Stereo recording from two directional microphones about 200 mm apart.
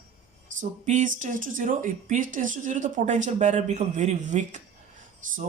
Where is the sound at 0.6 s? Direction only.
40° right (ahead or behind).